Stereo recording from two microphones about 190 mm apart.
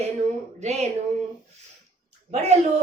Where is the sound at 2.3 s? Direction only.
35° right (ahead or behind).